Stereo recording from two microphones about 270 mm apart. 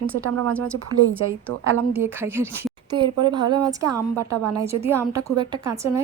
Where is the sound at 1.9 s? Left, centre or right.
Centre.